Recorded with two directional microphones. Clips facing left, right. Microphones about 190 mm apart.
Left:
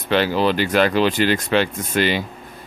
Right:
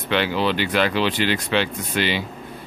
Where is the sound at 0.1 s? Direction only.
40° left (ahead or behind).